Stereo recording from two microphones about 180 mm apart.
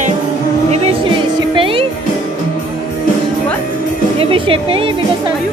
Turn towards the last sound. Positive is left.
turn(degrees=-30)  # may be behind; listen again after turning